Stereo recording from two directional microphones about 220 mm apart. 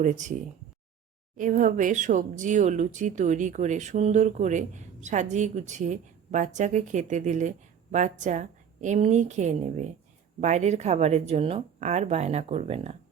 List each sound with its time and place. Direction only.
0.0 s speech: 35° right (ahead or behind)
1.4 s speech: 35° right (ahead or behind)